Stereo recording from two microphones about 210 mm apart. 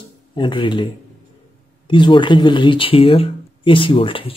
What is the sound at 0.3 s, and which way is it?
Speech, 25° left (ahead or behind).